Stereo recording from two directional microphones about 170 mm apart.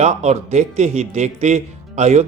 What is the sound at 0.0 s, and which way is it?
A man's voice, 40° right (ahead or behind).